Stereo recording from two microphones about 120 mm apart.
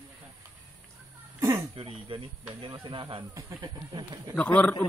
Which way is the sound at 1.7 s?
50° right (ahead or behind).